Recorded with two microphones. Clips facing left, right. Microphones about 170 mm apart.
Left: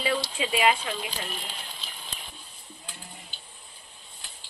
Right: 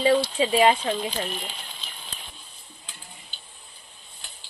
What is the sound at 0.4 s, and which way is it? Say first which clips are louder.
Speech: right 2 dB; 30° right (ahead or behind).